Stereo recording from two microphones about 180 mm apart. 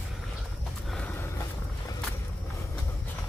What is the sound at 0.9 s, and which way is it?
Vehicle, 10° left (ahead or behind).